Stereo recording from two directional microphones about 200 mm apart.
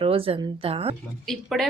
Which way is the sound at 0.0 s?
25° right (ahead or behind).